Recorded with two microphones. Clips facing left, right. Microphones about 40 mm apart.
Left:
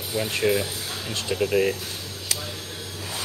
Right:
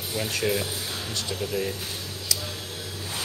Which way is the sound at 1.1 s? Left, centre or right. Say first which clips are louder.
Left 8 dB; left.